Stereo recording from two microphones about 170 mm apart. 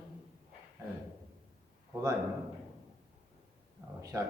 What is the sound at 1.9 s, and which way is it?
Speech, 15° right (ahead or behind).